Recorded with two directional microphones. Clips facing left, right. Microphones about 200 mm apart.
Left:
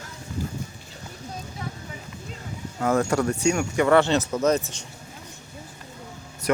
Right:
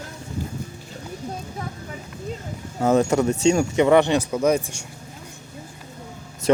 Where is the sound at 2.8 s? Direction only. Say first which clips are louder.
Right 4 dB; 20° right (ahead or behind).